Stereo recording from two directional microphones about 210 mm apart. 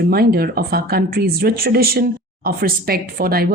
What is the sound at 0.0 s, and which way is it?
Speech, 45° right (ahead or behind).